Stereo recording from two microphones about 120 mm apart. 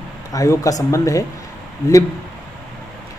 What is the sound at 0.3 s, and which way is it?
Speech, 30° left (ahead or behind).